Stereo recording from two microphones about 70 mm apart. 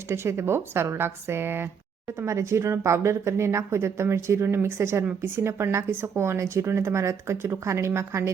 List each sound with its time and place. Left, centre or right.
0.1 s speech: right